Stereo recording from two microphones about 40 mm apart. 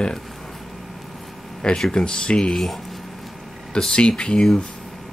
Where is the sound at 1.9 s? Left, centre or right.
Left.